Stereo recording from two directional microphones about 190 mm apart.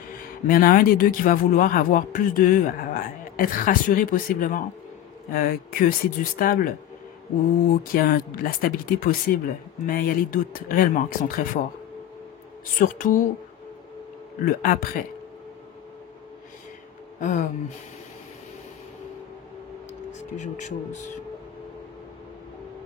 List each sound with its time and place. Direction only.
0.5 s a man's voice: 50° left (ahead or behind)
7.7 s a man's voice: 50° left (ahead or behind)
12.7 s a man's voice: 45° left (ahead or behind)
14.4 s a man's voice: 50° left (ahead or behind)
17.2 s a sound: 45° left (ahead or behind)
20.2 s speech: 40° left (ahead or behind)